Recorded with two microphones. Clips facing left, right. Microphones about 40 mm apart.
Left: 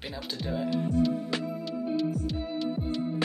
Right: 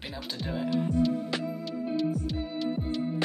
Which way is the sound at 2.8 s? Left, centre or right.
Left.